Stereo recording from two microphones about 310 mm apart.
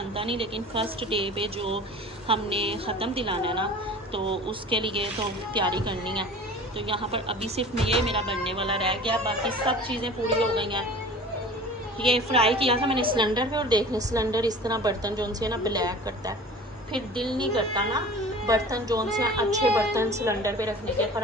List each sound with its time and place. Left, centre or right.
0.2 s a woman's voice: centre
12.1 s a woman's voice: centre